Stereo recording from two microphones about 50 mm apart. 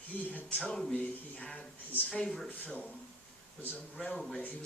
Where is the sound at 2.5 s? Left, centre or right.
Left.